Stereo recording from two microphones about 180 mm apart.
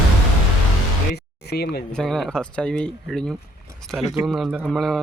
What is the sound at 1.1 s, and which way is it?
Speech, 65° left (ahead or behind).